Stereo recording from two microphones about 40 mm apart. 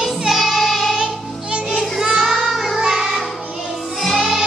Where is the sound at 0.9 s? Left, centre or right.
Right.